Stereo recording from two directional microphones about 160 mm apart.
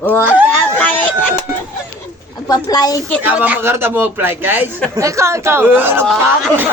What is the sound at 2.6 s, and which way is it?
Speech, 25° left (ahead or behind).